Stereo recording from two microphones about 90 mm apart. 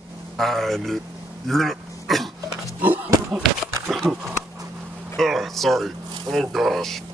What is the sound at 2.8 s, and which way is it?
Speech, 20° right (ahead or behind).